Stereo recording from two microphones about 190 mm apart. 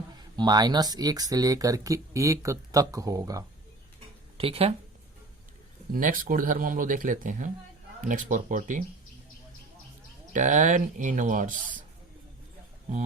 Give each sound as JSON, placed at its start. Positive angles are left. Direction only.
{"t": 0.3, "sound": "speech", "side_deg": -20}
{"t": 4.4, "sound": "speech", "side_deg": -30}
{"t": 5.9, "sound": "speech", "side_deg": -45}
{"t": 10.3, "sound": "speech", "side_deg": -40}